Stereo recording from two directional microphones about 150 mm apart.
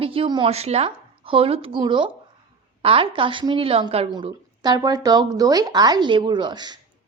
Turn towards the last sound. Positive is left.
turn(degrees=-30)  # may be behind; listen again after turning